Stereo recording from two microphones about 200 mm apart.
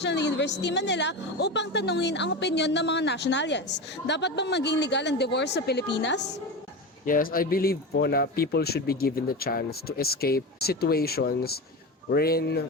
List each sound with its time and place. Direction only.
0.0 s a woman's voice: 60° left (ahead or behind)
7.0 s speech: 45° left (ahead or behind)